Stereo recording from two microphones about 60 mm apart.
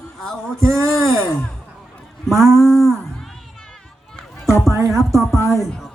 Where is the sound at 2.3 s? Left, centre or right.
Right.